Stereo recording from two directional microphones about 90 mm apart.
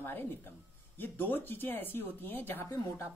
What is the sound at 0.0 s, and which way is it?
Speech, 25° left (ahead or behind).